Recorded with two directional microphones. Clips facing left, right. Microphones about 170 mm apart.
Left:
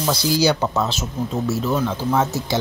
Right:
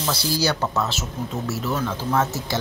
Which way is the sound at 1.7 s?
15° left (ahead or behind).